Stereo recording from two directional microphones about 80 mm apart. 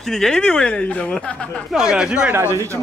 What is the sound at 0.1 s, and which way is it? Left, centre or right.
Speech, centre.